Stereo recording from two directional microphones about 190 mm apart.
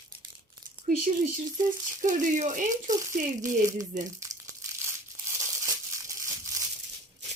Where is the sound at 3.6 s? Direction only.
20° right (ahead or behind).